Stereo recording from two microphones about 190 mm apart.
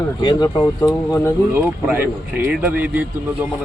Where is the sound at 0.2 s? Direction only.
25° left (ahead or behind).